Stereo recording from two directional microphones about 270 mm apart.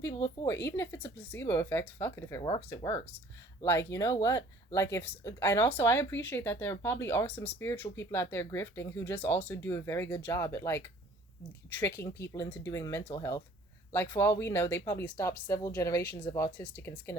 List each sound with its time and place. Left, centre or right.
0.0 s speech: centre